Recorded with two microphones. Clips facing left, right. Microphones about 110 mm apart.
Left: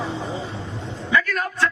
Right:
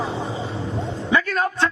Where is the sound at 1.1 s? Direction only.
25° right (ahead or behind).